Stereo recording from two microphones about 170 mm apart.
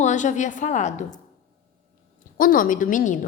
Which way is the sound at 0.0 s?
45° left (ahead or behind).